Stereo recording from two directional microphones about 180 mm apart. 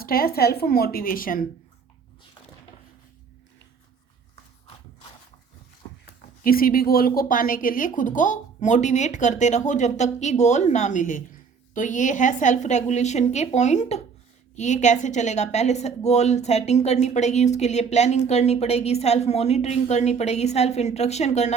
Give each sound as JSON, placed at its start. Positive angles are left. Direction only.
{"t": 0.0, "sound": "a woman's voice", "side_deg": 55}
{"t": 6.4, "sound": "a woman's voice", "side_deg": 50}